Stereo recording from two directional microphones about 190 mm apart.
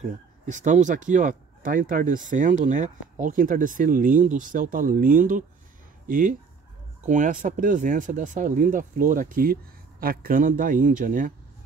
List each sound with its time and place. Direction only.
0.0 s speech: 40° right (ahead or behind)